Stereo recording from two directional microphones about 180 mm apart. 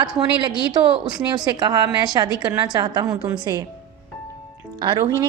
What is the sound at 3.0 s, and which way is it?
Speech, 5° right (ahead or behind).